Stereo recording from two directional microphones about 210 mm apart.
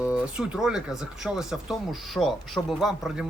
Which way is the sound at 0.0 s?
5° right (ahead or behind).